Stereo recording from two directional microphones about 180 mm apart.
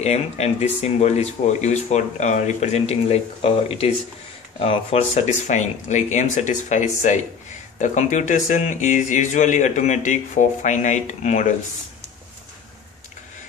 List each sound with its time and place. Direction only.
0.0 s speech: 35° left (ahead or behind)